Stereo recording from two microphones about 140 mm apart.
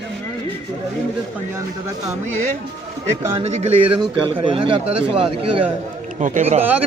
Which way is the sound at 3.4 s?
50° right (ahead or behind).